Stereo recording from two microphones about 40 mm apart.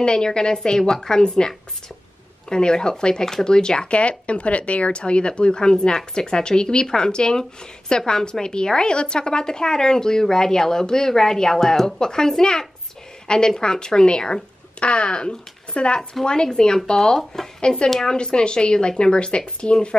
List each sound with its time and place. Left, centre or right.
0.0 s speech: left
2.5 s a woman's voice: centre
17.8 s a woman's voice: centre
18.1 s speech: left